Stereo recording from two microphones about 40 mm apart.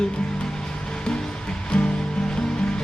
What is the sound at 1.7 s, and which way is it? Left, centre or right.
Music, left.